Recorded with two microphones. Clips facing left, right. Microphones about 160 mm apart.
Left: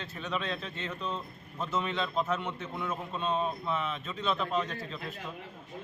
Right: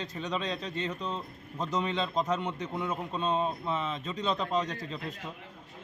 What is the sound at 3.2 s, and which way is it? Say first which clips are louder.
Speech: right 1 dB; 30° right (ahead or behind).